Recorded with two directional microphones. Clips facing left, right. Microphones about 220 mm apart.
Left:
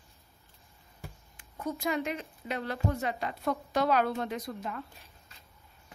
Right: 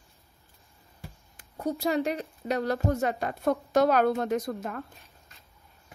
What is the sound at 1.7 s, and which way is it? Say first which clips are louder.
A woman's voice: right 5 dB; 35° right (ahead or behind).